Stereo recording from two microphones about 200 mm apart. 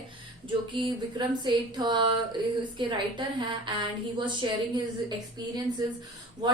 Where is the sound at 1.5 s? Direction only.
20° right (ahead or behind).